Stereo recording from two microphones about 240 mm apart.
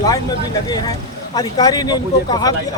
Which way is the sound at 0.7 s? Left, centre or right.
Centre.